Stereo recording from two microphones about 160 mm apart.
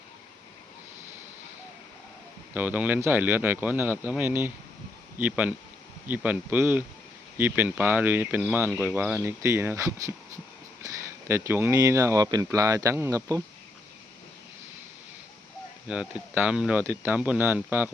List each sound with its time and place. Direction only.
2.6 s speech: 10° right (ahead or behind)
15.9 s speech: 10° right (ahead or behind)